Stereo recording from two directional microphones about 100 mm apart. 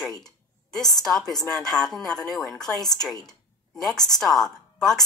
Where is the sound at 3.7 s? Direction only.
5° left (ahead or behind).